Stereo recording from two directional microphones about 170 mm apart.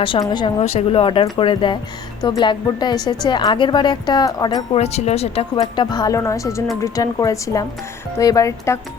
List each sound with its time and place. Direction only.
0.0 s a woman's voice: 30° left (ahead or behind)
4.8 s speech: 40° left (ahead or behind)
5.5 s a woman's voice: 25° left (ahead or behind)